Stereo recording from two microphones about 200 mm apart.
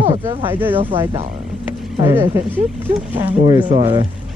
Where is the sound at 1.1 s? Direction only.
40° right (ahead or behind).